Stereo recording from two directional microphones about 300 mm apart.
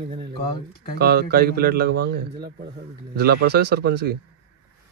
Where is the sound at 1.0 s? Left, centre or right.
Right.